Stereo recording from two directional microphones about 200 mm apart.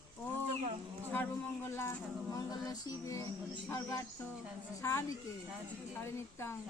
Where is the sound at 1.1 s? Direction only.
10° left (ahead or behind).